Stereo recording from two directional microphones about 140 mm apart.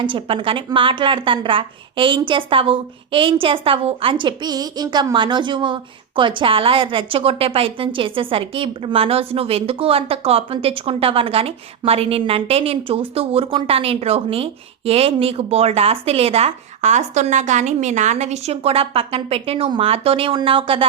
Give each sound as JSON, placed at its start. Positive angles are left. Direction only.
{"t": 0.0, "sound": "a woman's voice", "side_deg": -35}